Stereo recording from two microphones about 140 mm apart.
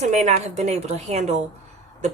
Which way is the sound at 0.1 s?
55° right (ahead or behind).